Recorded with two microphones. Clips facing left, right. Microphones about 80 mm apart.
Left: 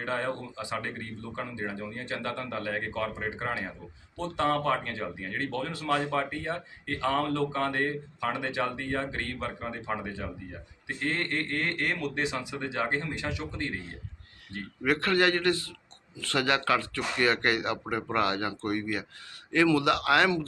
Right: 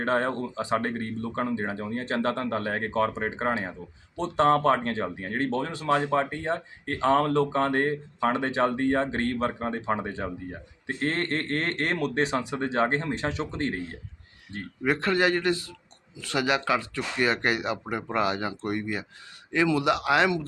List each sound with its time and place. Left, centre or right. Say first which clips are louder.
0.1 s speech: right 5 dB; right
5.4 s speech: right 5 dB; right
12.5 s speech: right 6 dB; right
13.1 s speech: right 5 dB; right
13.3 s speech: right 5 dB; right